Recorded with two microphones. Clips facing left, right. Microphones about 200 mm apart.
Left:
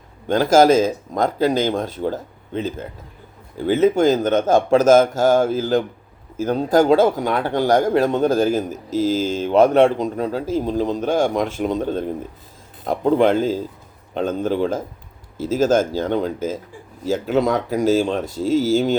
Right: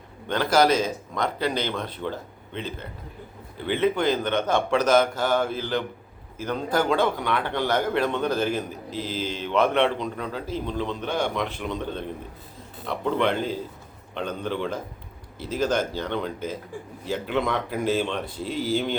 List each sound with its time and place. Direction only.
0.3 s a man's voice: 45° left (ahead or behind)